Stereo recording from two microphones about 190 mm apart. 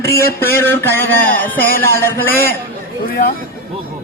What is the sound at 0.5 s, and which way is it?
Speech, 10° left (ahead or behind).